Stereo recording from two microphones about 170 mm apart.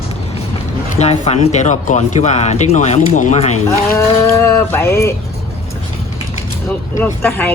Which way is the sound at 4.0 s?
15° left (ahead or behind).